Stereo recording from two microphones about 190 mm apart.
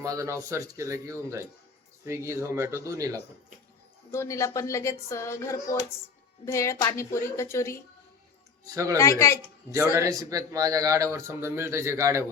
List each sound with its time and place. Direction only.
0.0 s a man's voice: 15° right (ahead or behind)
4.1 s speech: 15° left (ahead or behind)
8.6 s a man's voice: 15° right (ahead or behind)
9.0 s speech: 15° left (ahead or behind)
9.9 s a man's voice: 15° right (ahead or behind)